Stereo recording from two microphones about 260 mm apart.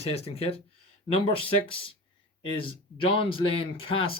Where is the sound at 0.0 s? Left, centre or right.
Left.